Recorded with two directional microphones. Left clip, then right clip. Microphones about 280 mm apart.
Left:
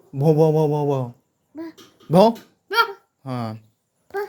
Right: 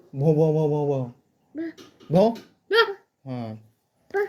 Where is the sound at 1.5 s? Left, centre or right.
Centre.